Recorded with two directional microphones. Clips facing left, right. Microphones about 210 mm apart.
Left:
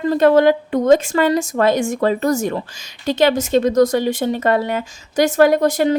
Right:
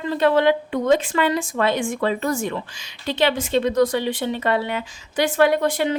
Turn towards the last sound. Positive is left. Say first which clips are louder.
# left 5 dB
turn(degrees=40)  # may be behind; listen again after turning